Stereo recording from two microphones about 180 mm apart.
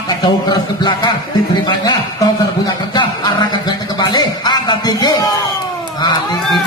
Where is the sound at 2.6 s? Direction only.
25° left (ahead or behind).